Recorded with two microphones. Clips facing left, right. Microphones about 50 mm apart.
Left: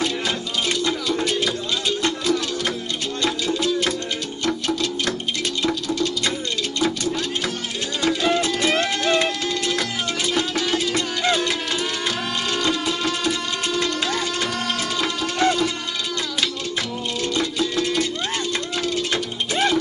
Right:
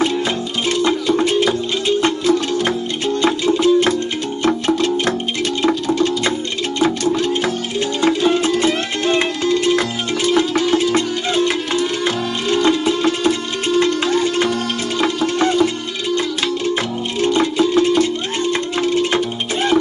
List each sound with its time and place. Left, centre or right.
0.7 s music: right
17.2 s music: right